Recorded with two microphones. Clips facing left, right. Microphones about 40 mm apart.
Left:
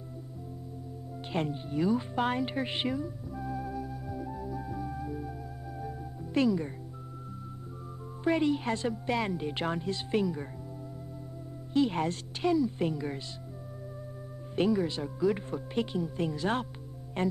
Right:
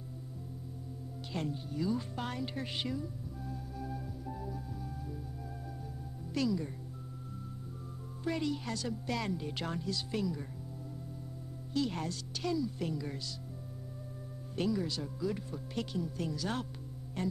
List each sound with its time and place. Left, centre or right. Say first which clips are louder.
1.3 s speech: left 6 dB; left
3.0 s music: left 5 dB; centre
4.6 s music: left 7 dB; centre
6.3 s speech: left 6 dB; left
8.2 s speech: left 8 dB; left
11.7 s speech: left 7 dB; left
14.5 s speech: left 6 dB; left